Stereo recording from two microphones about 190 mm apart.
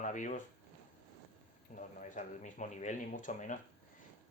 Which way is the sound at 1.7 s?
40° left (ahead or behind).